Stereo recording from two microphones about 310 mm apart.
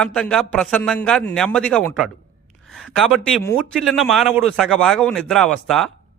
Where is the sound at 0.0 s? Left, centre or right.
Centre.